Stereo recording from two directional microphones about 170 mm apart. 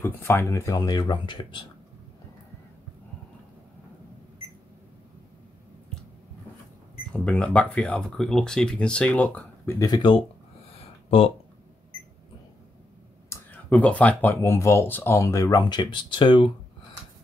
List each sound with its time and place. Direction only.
0.0 s speech: 15° left (ahead or behind); by 1.7 s 30° left (ahead or behind)
7.1 s speech: 5° left (ahead or behind); by 11.3 s 35° left (ahead or behind)
13.3 s speech: 10° left (ahead or behind); by 16.5 s 30° left (ahead or behind)